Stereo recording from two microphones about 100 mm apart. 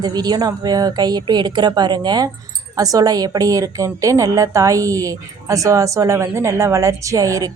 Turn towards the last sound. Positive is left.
turn(degrees=-35)  # may be behind; listen again after turning